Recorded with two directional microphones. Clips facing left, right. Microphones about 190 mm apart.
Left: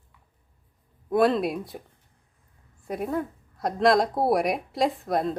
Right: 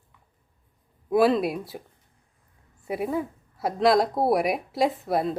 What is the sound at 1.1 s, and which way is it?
Speech, 5° right (ahead or behind).